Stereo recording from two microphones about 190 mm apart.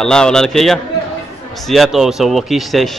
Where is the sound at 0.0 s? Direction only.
5° left (ahead or behind).